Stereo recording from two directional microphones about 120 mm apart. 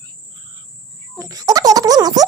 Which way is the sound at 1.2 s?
30° right (ahead or behind).